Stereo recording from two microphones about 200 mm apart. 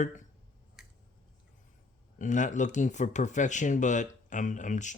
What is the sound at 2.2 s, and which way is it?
Speech, 40° left (ahead or behind).